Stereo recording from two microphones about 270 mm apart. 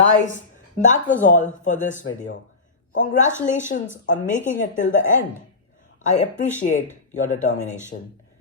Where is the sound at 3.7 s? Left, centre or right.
Left.